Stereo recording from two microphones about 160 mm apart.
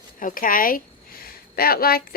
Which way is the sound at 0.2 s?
60° left (ahead or behind).